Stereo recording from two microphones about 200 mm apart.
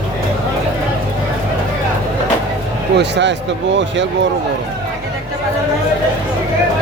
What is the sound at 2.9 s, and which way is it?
Speech, 60° right (ahead or behind).